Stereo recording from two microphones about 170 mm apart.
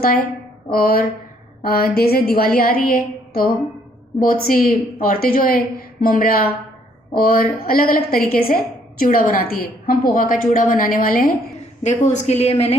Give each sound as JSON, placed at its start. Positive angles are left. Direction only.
{"t": 0.7, "sound": "a woman's voice", "side_deg": 60}
{"t": 11.8, "sound": "a woman's voice", "side_deg": 40}